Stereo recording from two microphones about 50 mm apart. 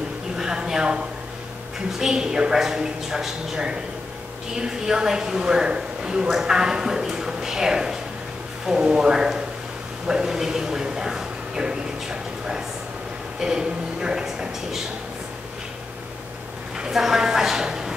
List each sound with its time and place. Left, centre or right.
0.4 s a sound: centre
2.0 s a woman's voice: centre
16.7 s a woman's voice: centre